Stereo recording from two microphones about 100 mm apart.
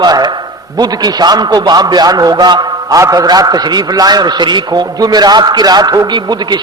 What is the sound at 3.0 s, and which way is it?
A man's voice, 30° right (ahead or behind).